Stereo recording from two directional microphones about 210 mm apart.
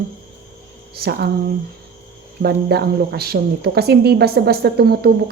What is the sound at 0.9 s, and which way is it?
Speech, 50° right (ahead or behind).